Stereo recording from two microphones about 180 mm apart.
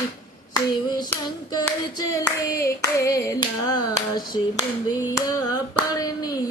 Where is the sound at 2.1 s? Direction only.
15° left (ahead or behind).